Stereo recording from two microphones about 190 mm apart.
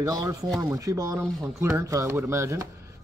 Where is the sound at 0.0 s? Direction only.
20° right (ahead or behind).